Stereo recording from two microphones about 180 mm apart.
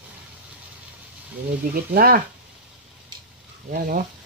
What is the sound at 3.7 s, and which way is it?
Speech, 50° right (ahead or behind).